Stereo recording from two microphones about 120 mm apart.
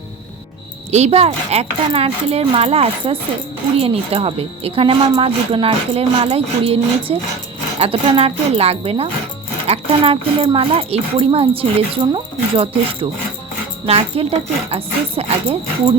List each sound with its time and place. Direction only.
0.9 s a woman's voice: 65° right (ahead or behind)